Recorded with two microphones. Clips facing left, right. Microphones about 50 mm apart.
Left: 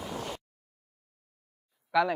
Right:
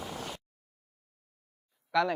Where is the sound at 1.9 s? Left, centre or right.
Centre.